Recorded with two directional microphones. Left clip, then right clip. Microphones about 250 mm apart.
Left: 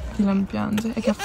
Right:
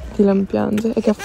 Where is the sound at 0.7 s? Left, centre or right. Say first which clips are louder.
Right 6 dB; centre.